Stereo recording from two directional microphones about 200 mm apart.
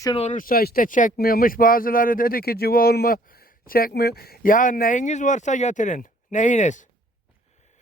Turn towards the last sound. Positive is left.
turn(degrees=35)  # may be behind; listen again after turning